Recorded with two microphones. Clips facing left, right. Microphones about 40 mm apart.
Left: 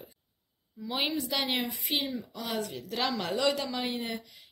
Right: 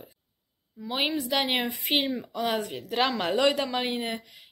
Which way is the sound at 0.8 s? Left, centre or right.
Centre.